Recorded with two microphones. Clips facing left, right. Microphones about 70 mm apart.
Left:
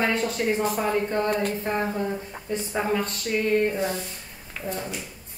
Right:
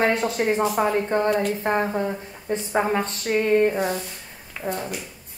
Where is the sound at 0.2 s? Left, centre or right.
Right.